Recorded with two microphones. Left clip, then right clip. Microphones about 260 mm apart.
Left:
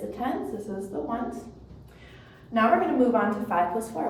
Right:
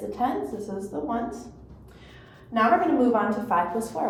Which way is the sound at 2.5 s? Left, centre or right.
Centre.